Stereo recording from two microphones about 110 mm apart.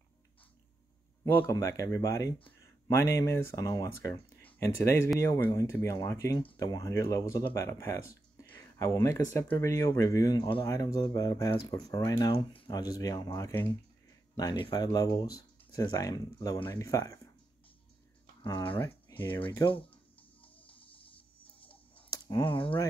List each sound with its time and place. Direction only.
1.2 s speech: 25° left (ahead or behind); by 10.7 s 45° left (ahead or behind)
10.7 s speech: 35° left (ahead or behind)
18.4 s speech: 50° left (ahead or behind)
19.1 s a sound: 35° left (ahead or behind)
19.6 s speech: 55° left (ahead or behind)
20.2 s music: 55° left (ahead or behind)
22.4 s speech: 55° left (ahead or behind)